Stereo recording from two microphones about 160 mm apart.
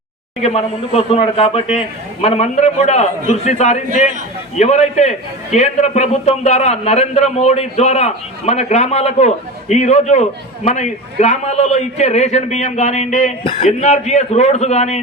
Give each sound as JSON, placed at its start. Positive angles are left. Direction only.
{"t": 0.4, "sound": "a man's voice", "side_deg": 40}